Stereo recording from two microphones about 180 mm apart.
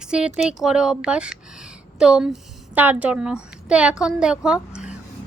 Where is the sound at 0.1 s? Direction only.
5° right (ahead or behind).